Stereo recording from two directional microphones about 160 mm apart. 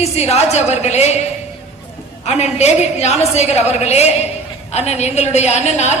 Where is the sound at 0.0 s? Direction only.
40° left (ahead or behind).